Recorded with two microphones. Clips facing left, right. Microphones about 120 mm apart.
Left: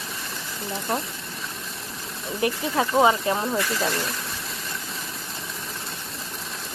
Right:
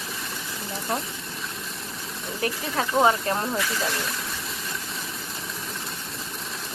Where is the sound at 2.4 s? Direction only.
20° left (ahead or behind).